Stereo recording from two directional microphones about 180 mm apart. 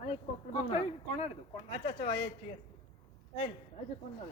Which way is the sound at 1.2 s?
35° left (ahead or behind).